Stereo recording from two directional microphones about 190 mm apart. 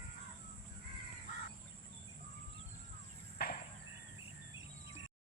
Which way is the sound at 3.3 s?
55° left (ahead or behind).